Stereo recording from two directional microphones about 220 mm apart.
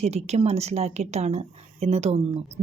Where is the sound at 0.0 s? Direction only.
30° right (ahead or behind).